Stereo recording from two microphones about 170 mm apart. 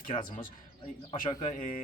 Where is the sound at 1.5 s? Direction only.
45° left (ahead or behind).